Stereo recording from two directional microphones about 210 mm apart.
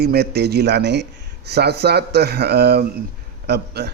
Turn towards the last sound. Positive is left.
turn(degrees=-50)  # may be behind; listen again after turning